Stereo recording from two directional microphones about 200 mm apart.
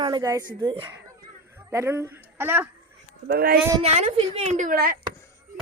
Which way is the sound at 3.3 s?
50° right (ahead or behind).